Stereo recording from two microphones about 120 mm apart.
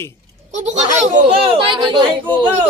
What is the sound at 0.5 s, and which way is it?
Speech, 85° right.